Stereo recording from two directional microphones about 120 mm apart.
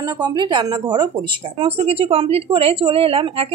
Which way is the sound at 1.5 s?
55° right (ahead or behind).